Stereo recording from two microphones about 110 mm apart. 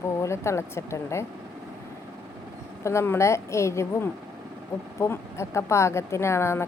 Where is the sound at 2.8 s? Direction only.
25° left (ahead or behind).